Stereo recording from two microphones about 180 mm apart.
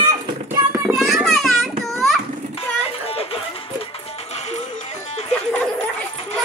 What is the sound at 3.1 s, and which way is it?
Music, 35° left (ahead or behind).